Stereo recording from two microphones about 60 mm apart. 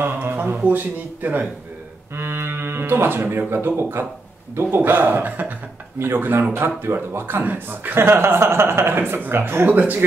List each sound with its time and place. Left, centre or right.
0.0 s a sound: right
0.7 s a man's voice: right
2.1 s speech: right